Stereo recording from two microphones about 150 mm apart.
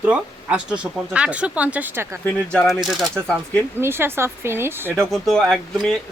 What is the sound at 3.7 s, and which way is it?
Speech, 15° right (ahead or behind).